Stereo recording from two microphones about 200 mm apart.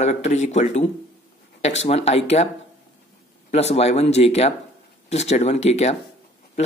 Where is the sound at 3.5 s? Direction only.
30° left (ahead or behind).